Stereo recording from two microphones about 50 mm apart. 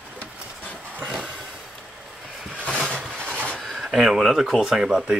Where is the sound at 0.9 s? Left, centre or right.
Right.